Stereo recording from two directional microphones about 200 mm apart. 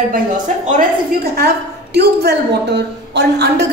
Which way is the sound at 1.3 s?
55° right (ahead or behind).